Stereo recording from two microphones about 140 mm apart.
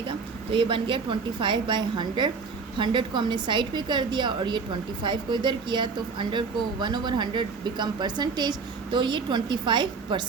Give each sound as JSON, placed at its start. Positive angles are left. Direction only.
{"t": 0.5, "sound": "a woman's voice", "side_deg": -35}